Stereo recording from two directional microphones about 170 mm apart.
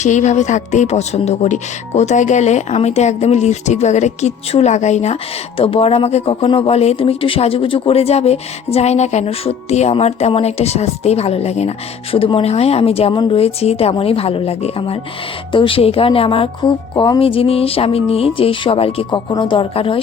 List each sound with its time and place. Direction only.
0.0 s speech: 45° left (ahead or behind)